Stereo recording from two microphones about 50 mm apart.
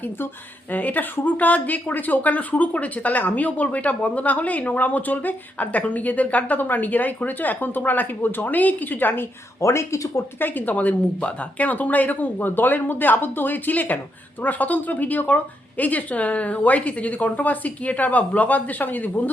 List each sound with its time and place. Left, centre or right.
0.7 s speech: left
9.6 s speech: left
10.4 s speech: left